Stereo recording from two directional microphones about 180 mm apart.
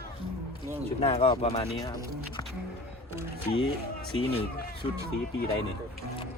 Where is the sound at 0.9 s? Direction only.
35° left (ahead or behind).